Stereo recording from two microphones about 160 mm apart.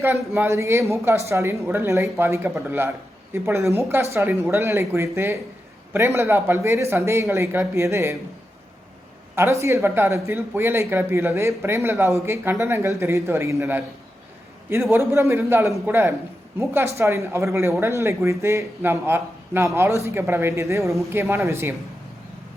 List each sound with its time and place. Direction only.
0.0 s speech: 15° right (ahead or behind)
9.3 s speech: 15° right (ahead or behind)